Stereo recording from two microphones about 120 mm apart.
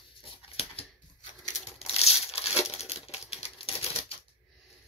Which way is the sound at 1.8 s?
55° left (ahead or behind).